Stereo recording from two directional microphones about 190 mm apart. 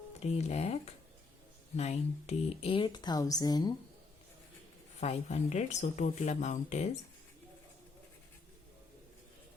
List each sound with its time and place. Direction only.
0.2 s speech: 35° left (ahead or behind)
4.9 s speech: 35° left (ahead or behind)